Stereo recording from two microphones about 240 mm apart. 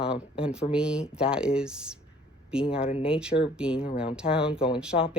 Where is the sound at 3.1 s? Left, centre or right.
Centre.